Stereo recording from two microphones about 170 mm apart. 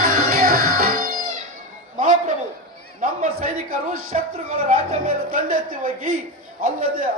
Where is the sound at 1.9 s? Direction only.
50° right (ahead or behind).